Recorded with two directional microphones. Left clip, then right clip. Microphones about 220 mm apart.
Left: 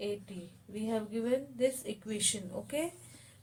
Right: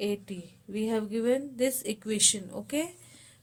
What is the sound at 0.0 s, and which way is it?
A woman's voice, 50° right (ahead or behind).